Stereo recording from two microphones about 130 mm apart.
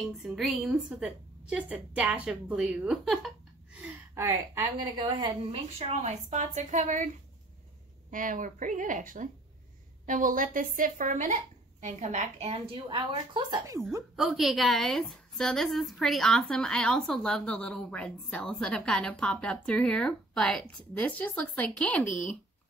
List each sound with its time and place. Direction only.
0.2 s a woman's voice: 5° right (ahead or behind)
4.1 s a woman's voice: 25° right (ahead or behind)
4.9 s a woman's voice: 35° right (ahead or behind)
5.8 s a woman's voice: 55° right (ahead or behind); by 7.1 s 70° right (ahead or behind)
8.1 s a woman's voice: 90° right
11.8 s a woman's voice: 65° right (ahead or behind)
12.7 s a woman's voice: 40° right (ahead or behind)
14.1 s a woman's voice: centre (ahead or behind)